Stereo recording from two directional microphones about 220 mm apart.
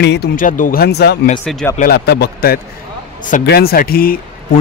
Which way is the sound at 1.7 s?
45° left (ahead or behind).